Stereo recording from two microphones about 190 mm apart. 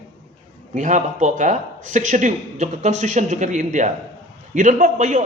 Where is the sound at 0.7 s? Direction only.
40° right (ahead or behind).